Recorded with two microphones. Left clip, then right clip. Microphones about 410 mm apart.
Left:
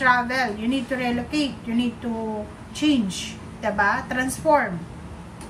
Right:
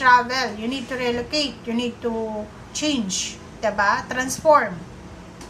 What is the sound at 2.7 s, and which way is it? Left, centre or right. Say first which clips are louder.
A woman's voice: left 2 dB; centre.